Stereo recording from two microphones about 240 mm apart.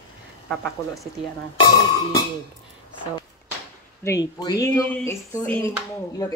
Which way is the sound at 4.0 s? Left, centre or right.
Centre.